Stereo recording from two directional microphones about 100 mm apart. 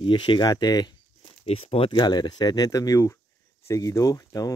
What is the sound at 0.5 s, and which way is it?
Speech, 40° left (ahead or behind).